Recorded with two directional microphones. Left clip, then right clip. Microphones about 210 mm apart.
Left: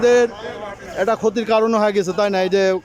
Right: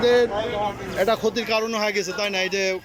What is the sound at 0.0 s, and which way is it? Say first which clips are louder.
Speech: left 4 dB; 10° left (ahead or behind).